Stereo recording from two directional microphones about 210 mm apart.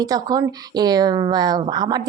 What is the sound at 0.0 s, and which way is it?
Speech, 20° right (ahead or behind).